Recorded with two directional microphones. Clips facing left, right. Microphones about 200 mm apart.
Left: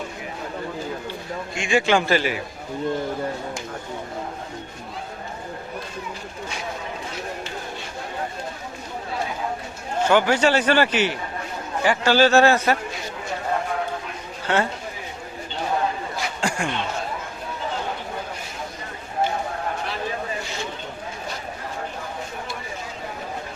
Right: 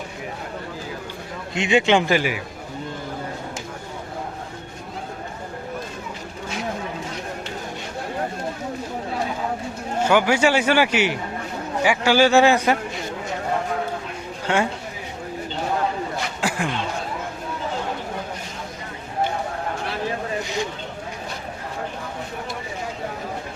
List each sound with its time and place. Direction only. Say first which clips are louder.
1.5 s a man's voice: right 2 dB; 20° right (ahead or behind)
10.0 s a man's voice: even; 10° right (ahead or behind)
14.4 s speech: right 1 dB; 10° right (ahead or behind)
16.1 s a sound: right 1 dB; 5° right (ahead or behind)